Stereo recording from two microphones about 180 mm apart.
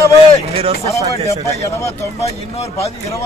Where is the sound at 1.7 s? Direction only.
15° left (ahead or behind).